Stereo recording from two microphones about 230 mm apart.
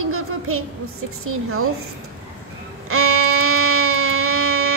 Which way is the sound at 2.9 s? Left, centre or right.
Right.